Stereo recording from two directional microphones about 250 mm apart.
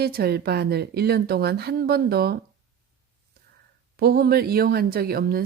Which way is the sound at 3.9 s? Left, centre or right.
Right.